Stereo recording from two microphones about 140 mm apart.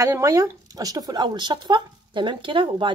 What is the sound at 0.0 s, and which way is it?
Speech, 20° right (ahead or behind).